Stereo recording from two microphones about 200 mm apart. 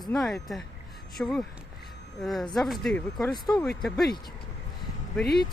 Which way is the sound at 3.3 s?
20° left (ahead or behind).